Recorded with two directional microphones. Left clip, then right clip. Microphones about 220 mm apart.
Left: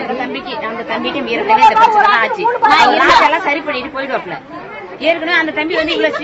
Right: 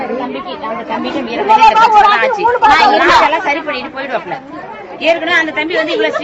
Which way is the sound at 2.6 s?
10° right (ahead or behind).